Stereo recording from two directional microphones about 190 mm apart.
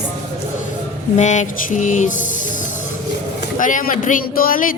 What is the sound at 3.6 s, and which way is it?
Speech, 45° left (ahead or behind).